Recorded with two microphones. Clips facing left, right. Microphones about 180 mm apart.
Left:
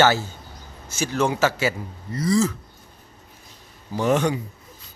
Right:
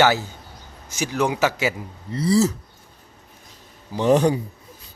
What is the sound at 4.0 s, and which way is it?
Speech, 30° right (ahead or behind).